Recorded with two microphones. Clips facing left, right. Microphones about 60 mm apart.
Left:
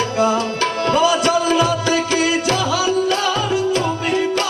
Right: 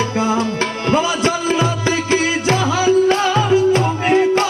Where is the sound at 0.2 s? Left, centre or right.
Right.